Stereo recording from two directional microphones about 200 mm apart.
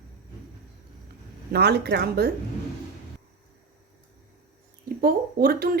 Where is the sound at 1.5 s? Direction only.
55° right (ahead or behind).